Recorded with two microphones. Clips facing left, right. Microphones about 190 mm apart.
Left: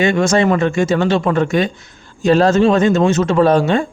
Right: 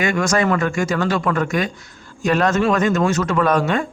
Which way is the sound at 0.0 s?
25° left (ahead or behind).